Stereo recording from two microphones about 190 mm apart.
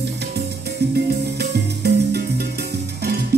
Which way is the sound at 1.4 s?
60° right (ahead or behind).